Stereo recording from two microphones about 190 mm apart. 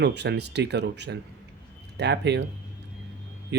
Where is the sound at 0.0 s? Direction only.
65° right (ahead or behind).